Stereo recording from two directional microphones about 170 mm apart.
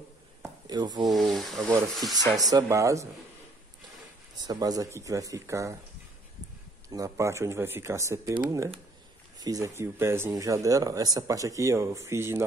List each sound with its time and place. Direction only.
0.7 s speech: 25° right (ahead or behind)
1.0 s speech: centre (ahead or behind)
1.6 s speech: 20° right (ahead or behind)
4.4 s speech: 20° right (ahead or behind)
6.9 s speech: 20° right (ahead or behind)